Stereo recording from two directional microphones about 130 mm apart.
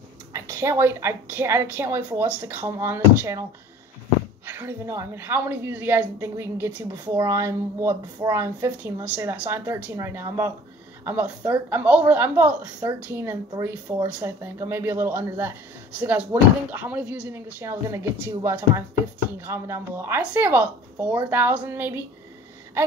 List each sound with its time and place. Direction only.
0.3 s a woman's voice: 20° right (ahead or behind)
4.5 s a woman's voice: 15° right (ahead or behind)